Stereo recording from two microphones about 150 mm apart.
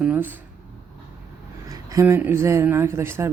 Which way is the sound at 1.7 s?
20° right (ahead or behind).